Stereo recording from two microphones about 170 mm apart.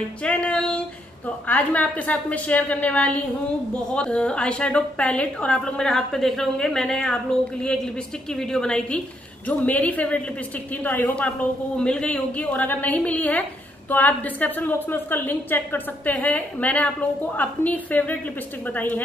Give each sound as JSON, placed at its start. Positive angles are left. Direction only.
{"t": 0.2, "sound": "music", "side_deg": 5}
{"t": 1.5, "sound": "a woman's voice", "side_deg": 10}
{"t": 8.3, "sound": "a woman's voice", "side_deg": 5}